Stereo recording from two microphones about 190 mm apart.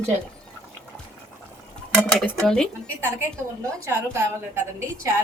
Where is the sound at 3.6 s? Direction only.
15° right (ahead or behind).